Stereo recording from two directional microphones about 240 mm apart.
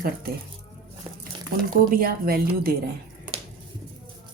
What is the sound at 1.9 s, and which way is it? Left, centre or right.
Speech, right.